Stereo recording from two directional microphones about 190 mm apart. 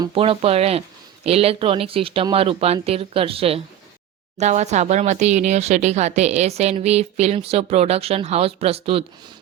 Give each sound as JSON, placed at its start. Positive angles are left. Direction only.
{"t": 0.0, "sound": "speech", "side_deg": -30}